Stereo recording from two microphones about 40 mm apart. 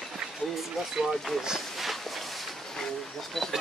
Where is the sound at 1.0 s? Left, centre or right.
Centre.